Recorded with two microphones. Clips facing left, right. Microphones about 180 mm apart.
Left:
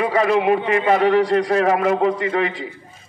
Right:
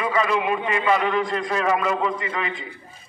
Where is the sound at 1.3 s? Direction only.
65° left (ahead or behind).